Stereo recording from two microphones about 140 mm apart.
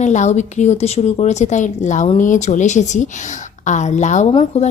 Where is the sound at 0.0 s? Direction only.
55° left (ahead or behind).